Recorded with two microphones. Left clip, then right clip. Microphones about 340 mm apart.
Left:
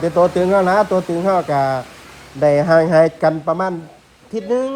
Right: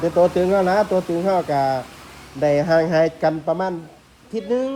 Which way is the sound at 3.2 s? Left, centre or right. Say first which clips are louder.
Left 3 dB; left.